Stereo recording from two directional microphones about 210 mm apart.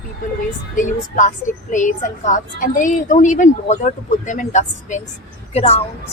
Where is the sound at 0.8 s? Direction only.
35° left (ahead or behind).